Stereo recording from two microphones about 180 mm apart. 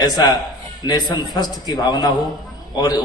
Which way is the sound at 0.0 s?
20° left (ahead or behind).